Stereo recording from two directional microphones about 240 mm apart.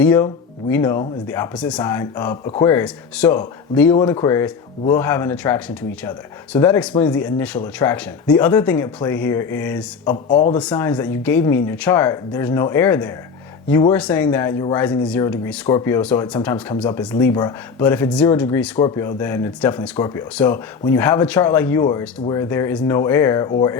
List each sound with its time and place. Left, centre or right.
0.0 s speech: centre
10.2 s speech: left
10.6 s speech: centre